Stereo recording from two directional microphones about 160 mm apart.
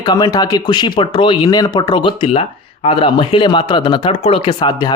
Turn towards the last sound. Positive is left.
turn(degrees=25)  # may be behind; listen again after turning